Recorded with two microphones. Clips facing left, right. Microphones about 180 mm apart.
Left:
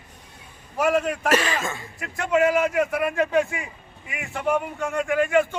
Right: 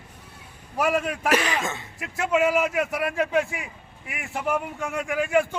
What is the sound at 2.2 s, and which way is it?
A man's voice, 5° right (ahead or behind).